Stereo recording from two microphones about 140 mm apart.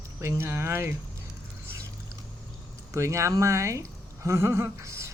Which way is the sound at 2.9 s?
20° right (ahead or behind).